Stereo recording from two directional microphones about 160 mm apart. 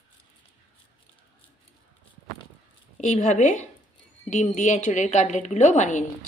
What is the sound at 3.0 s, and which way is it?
A woman's voice, 50° left (ahead or behind).